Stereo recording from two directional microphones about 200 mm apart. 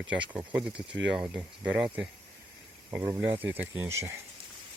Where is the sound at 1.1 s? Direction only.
5° right (ahead or behind).